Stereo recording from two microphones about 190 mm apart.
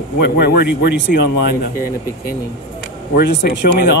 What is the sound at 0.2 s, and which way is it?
Speech, 60° left (ahead or behind).